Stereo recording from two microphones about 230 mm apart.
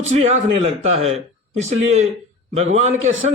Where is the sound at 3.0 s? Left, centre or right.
Right.